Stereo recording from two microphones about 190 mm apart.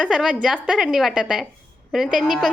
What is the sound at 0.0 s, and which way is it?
A woman's voice, 5° right (ahead or behind).